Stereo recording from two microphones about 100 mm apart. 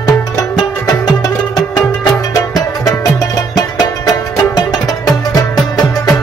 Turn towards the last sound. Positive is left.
turn(degrees=35)  # may be behind; listen again after turning